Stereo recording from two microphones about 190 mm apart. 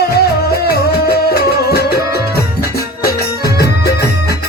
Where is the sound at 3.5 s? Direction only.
55° left (ahead or behind).